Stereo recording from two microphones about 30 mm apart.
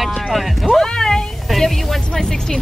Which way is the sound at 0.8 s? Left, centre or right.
Centre.